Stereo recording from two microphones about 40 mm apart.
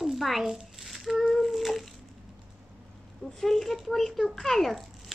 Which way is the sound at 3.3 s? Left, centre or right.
Centre.